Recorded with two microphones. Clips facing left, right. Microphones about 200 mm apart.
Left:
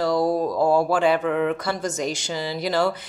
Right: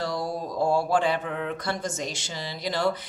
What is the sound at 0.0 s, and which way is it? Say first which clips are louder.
Mantra: left 9 dB; 55° left (ahead or behind).